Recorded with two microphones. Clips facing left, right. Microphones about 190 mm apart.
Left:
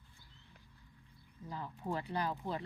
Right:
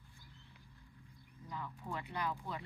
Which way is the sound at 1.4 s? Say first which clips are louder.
Left 4 dB; 30° left (ahead or behind).